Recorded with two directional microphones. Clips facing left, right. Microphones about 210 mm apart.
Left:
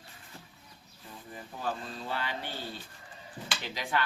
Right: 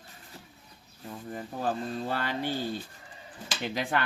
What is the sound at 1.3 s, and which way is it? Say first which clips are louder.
Speech: right 5 dB; 50° right (ahead or behind).